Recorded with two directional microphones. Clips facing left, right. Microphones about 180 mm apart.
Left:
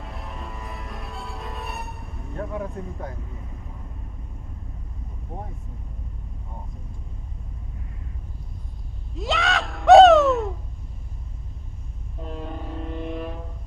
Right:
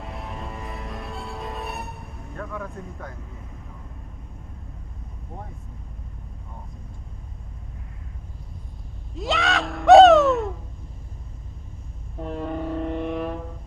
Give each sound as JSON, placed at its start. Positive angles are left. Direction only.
{"t": 0.0, "sound": "music", "side_deg": 0}
{"t": 2.3, "sound": "speech", "side_deg": 25}
{"t": 9.1, "sound": "a sound", "side_deg": 0}
{"t": 12.3, "sound": "vehicle", "side_deg": -60}